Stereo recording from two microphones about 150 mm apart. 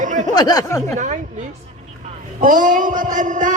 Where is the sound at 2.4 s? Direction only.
65° right (ahead or behind).